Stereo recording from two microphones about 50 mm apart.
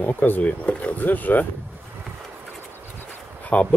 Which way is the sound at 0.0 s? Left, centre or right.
Left.